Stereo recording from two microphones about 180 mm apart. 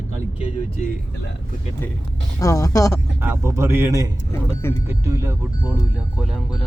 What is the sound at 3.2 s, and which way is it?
Speech, 10° right (ahead or behind).